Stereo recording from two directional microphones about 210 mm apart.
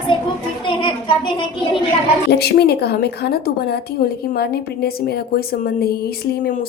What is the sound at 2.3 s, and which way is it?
A woman's voice, 50° left (ahead or behind).